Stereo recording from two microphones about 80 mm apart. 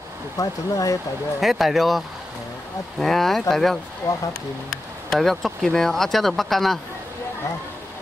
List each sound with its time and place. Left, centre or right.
0.4 s speech: left
1.4 s speech: centre
4.0 s speech: left
5.1 s speech: centre